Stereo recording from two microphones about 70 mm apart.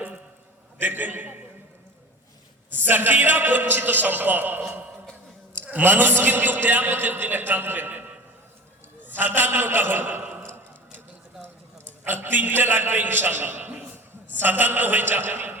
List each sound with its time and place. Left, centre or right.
0.8 s a man's voice: right
2.7 s a man's voice: right
9.0 s a sound: right
12.0 s a man's voice: right